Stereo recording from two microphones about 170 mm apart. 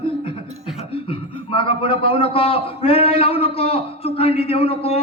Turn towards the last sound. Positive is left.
turn(degrees=35)  # may be behind; listen again after turning